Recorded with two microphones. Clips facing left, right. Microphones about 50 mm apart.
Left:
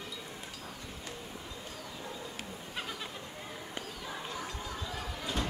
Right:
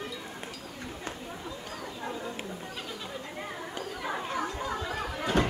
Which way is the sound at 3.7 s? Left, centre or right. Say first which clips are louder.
Right 8 dB; right.